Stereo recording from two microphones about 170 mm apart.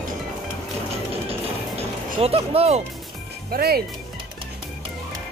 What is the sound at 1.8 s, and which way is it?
Speech, 35° right (ahead or behind).